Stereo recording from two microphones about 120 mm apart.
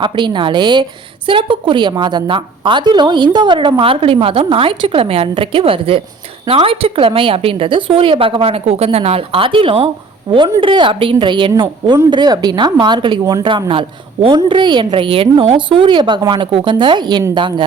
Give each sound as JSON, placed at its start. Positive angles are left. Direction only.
{"t": 0.0, "sound": "a woman's voice", "side_deg": -40}
{"t": 10.3, "sound": "a woman's voice", "side_deg": -45}